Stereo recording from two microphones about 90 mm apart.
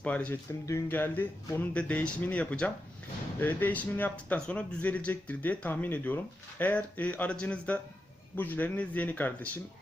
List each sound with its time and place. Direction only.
0.0 s speech: 15° left (ahead or behind)